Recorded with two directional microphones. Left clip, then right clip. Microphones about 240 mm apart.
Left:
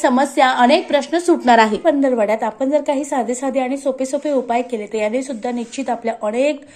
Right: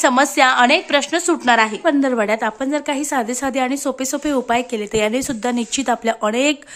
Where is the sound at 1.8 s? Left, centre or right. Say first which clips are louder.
Left 2 dB; centre.